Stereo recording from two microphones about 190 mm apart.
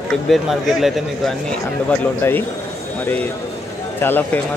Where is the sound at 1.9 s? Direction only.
10° left (ahead or behind).